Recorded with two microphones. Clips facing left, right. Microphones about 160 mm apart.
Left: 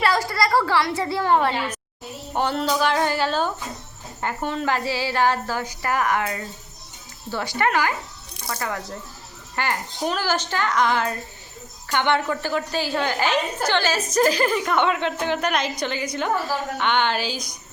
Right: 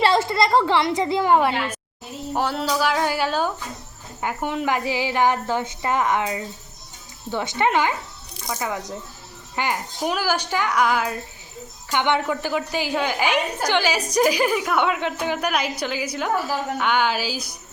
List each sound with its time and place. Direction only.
0.0 s a woman's voice: 25° right (ahead or behind); by 17.6 s 5° right (ahead or behind)